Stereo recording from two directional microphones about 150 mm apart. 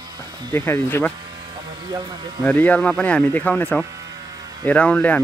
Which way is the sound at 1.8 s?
30° right (ahead or behind).